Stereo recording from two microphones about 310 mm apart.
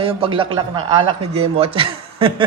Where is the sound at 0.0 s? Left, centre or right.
Centre.